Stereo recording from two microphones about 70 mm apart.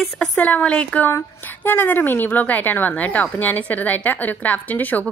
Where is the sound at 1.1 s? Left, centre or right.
Left.